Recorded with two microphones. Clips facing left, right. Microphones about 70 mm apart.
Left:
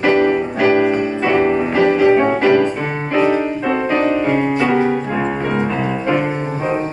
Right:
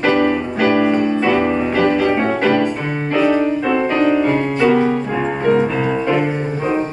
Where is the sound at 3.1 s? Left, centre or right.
Left.